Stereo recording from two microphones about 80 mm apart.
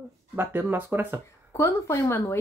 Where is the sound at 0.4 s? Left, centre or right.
Right.